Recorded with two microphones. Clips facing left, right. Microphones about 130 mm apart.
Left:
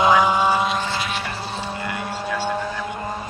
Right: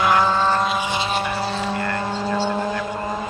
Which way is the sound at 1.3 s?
90° right.